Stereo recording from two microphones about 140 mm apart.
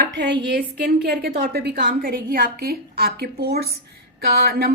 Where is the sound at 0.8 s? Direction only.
90° right.